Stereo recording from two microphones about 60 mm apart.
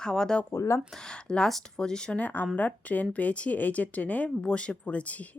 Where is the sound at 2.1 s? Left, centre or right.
Left.